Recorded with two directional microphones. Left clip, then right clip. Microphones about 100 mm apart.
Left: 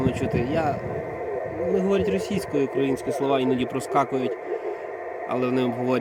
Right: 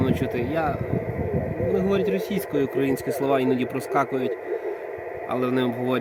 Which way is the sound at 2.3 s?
20° right (ahead or behind).